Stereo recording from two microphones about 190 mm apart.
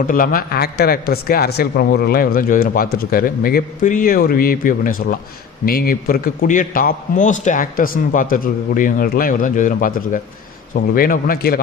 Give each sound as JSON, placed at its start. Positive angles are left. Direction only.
{"t": 0.1, "sound": "a man's voice", "side_deg": 45}